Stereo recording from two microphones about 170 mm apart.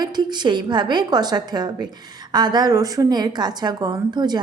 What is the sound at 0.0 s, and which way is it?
A woman's voice, 25° right (ahead or behind).